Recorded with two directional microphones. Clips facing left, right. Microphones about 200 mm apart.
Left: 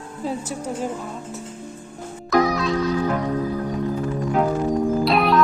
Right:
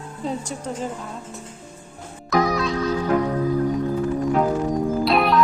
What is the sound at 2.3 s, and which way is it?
Music, centre (ahead or behind).